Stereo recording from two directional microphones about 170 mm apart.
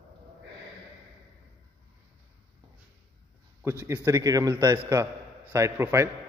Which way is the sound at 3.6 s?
15° right (ahead or behind).